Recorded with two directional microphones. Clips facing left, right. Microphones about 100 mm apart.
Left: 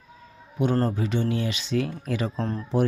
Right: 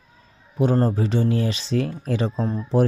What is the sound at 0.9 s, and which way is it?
Speech, 35° right (ahead or behind).